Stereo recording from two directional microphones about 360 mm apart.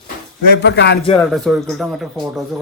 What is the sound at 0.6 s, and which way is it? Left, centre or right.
Speech, left.